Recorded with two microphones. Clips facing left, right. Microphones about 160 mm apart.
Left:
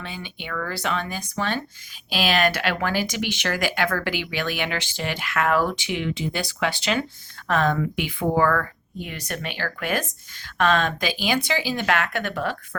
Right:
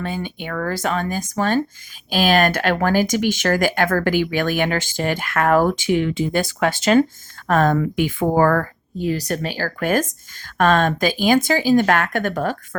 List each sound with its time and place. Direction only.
0.0 s speech: 45° right (ahead or behind)